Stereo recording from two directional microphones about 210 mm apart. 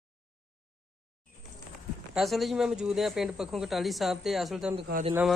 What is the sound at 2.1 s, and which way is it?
Speech, centre (ahead or behind).